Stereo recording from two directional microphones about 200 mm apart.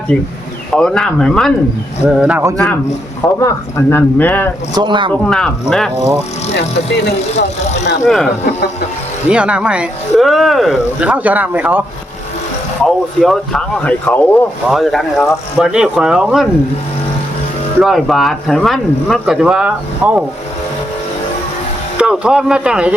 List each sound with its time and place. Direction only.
0.7 s speech: 5° left (ahead or behind)
3.4 s speech: 10° left (ahead or behind)
4.7 s speech: 20° right (ahead or behind)
5.3 s speech: centre (ahead or behind)
6.5 s speech: 60° left (ahead or behind)
7.3 s speech: 35° left (ahead or behind)
8.0 s speech: centre (ahead or behind)
9.3 s speech: 5° right (ahead or behind)
12.8 s speech: centre (ahead or behind)
17.8 s speech: centre (ahead or behind)
21.9 s speech: 5° right (ahead or behind)